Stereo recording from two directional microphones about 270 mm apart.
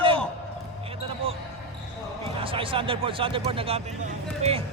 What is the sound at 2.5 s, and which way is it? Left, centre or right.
Speech, centre.